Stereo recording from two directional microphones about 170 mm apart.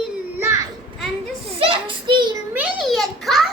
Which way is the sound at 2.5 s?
5° right (ahead or behind).